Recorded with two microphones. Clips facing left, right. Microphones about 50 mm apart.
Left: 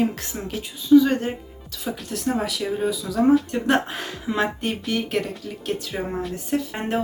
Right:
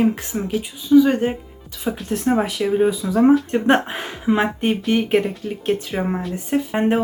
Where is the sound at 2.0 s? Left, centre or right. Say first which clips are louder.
Right 6 dB; right.